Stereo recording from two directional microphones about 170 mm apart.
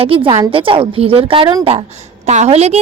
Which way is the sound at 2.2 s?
40° right (ahead or behind).